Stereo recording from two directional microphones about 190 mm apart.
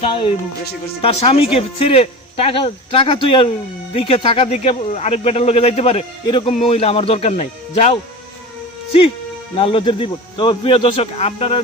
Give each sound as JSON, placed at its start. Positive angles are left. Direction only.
{"t": 0.0, "sound": "speech", "side_deg": 25}
{"t": 9.6, "sound": "speech", "side_deg": 30}